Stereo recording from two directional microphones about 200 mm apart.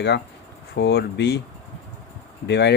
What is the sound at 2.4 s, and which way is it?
Speech, 60° left (ahead or behind).